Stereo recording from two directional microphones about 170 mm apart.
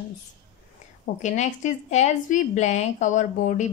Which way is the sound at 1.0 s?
45° left (ahead or behind).